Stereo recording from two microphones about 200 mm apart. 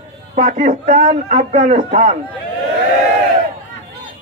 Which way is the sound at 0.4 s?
40° right (ahead or behind).